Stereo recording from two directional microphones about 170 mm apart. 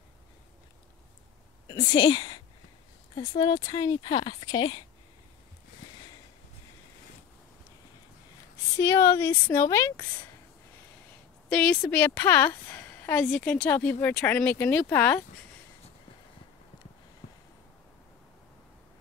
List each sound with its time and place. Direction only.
1.7 s a woman's voice: 25° left (ahead or behind)
8.7 s a woman's voice: 15° left (ahead or behind)
11.4 s a woman's voice: 5° left (ahead or behind)